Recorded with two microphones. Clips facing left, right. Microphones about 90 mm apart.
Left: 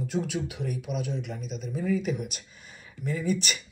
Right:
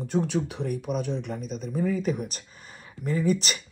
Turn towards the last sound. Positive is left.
turn(degrees=-45)  # may be behind; listen again after turning